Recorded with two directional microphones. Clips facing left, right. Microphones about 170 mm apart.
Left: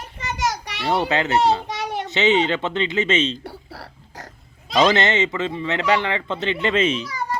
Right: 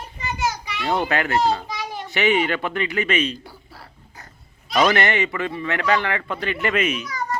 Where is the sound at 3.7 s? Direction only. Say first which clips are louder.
Left 6 dB; 80° left.